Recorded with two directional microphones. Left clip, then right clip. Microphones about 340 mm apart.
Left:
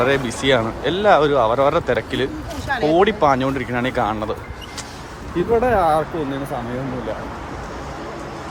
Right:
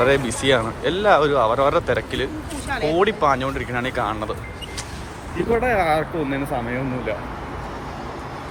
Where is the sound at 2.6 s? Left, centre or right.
Left.